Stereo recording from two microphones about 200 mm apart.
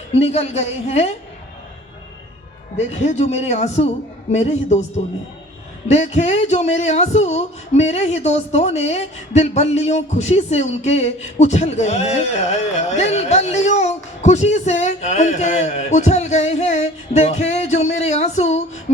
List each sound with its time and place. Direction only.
0.1 s speech: 30° left (ahead or behind)
2.7 s speech: 35° left (ahead or behind)
5.9 s speech: 35° left (ahead or behind)